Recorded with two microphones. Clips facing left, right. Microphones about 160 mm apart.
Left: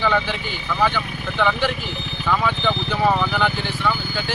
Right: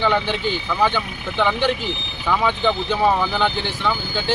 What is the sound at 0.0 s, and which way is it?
Speech, 20° right (ahead or behind).